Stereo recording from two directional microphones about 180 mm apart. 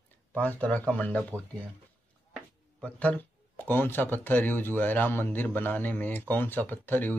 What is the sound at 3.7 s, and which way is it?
Speech, 10° left (ahead or behind).